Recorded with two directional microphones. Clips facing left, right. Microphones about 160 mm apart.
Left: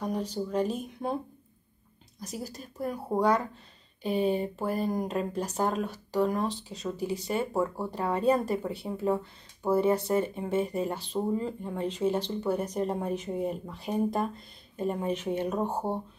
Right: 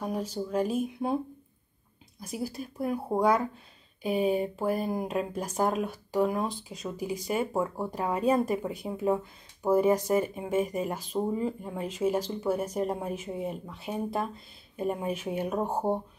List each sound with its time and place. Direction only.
0.0 s speech: 5° right (ahead or behind)
2.1 s speech: 10° right (ahead or behind)